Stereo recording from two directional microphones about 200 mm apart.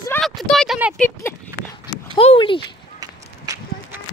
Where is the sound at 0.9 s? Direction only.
10° left (ahead or behind).